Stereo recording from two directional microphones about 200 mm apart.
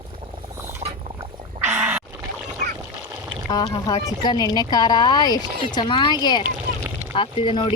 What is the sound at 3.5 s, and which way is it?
Speech, 20° left (ahead or behind).